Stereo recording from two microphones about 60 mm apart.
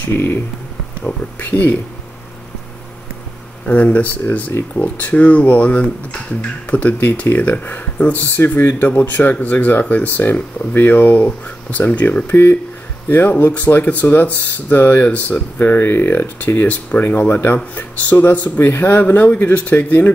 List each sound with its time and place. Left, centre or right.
0.1 s speech: left
3.6 s speech: left